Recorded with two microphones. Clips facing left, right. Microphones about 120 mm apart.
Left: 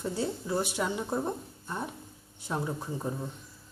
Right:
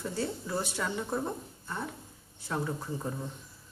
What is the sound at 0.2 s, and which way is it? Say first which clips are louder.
Speech: left 2 dB; 15° left (ahead or behind).